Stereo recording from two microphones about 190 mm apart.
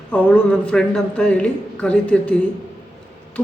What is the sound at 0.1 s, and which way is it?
A man's voice, 5° left (ahead or behind).